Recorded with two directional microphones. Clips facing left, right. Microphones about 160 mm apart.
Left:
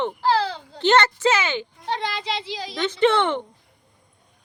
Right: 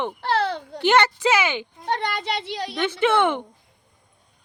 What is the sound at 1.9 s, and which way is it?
Speech, 55° right (ahead or behind).